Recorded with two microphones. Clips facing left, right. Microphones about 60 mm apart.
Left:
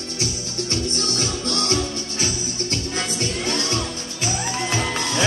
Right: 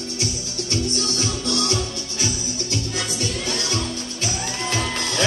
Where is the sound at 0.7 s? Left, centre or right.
Left.